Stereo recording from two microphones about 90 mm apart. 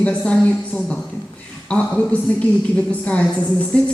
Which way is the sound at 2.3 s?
15° left (ahead or behind).